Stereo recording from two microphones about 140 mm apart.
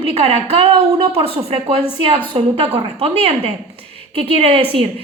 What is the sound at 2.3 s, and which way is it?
A woman's voice, 40° right (ahead or behind).